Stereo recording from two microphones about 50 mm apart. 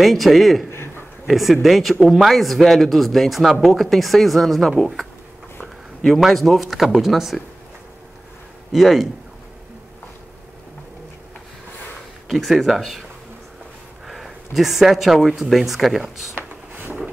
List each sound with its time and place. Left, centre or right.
0.0 s speech: centre
0.7 s a sound: left
1.2 s speech: centre
6.0 s speech: centre
8.7 s speech: centre
12.3 s speech: centre
14.0 s speech: centre
16.3 s a sound: right